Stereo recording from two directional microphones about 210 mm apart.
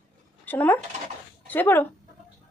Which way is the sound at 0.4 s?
10° left (ahead or behind).